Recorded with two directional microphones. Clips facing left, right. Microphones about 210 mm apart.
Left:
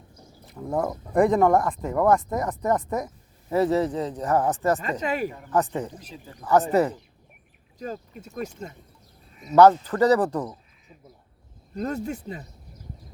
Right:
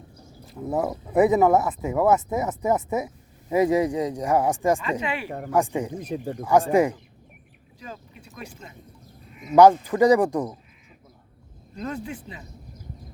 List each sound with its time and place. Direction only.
0.6 s speech: 5° right (ahead or behind)
4.8 s speech: 45° left (ahead or behind)
5.5 s speech: 10° right (ahead or behind)
6.0 s speech: 60° right (ahead or behind)
6.4 s speech: 10° right (ahead or behind)
7.8 s speech: 45° left (ahead or behind)
9.6 s speech: 10° right (ahead or behind)
11.7 s speech: 40° left (ahead or behind)